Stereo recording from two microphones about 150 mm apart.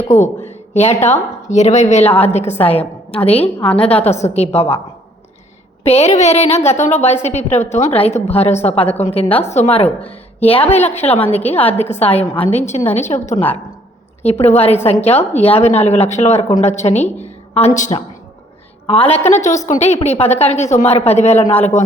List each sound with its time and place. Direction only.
0.1 s a woman's voice: 50° left (ahead or behind)
5.8 s a woman's voice: 45° left (ahead or behind)
14.4 s a woman's voice: 45° left (ahead or behind)